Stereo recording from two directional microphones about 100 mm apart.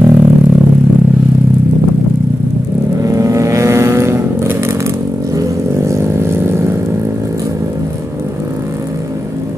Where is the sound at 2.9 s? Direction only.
35° right (ahead or behind).